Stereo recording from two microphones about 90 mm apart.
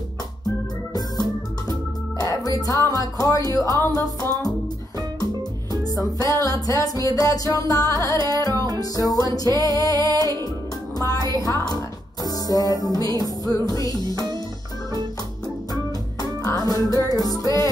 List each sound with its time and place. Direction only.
1.7 s music: 45° left (ahead or behind)
11.3 s speech: 40° left (ahead or behind)
13.7 s music: 45° left (ahead or behind)
15.7 s music: 45° left (ahead or behind)